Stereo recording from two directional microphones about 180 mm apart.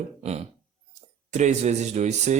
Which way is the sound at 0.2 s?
35° right (ahead or behind).